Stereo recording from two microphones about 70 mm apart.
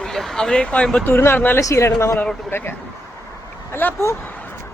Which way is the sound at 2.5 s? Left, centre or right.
Left.